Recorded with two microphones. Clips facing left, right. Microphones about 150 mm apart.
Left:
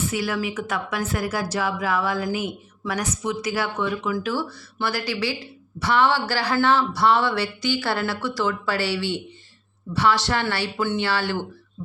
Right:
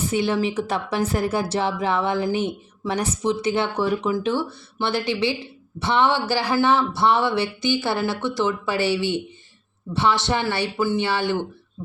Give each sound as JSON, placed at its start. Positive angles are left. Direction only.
{"t": 0.1, "sound": "a woman's voice", "side_deg": -25}